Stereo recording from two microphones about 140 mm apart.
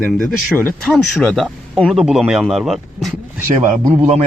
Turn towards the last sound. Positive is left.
turn(degrees=-55)  # may be behind; listen again after turning